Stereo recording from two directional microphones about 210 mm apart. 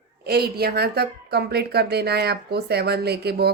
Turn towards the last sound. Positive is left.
turn(degrees=-50)  # may be behind; listen again after turning